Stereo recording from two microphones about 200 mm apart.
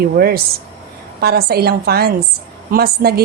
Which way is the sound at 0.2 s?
50° right (ahead or behind).